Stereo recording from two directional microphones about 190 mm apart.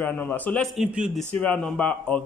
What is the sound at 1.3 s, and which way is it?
Speech, 5° left (ahead or behind).